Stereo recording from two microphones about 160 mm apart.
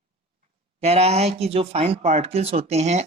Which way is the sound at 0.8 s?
40° right (ahead or behind).